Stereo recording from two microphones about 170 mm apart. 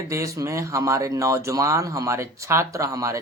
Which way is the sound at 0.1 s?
20° right (ahead or behind).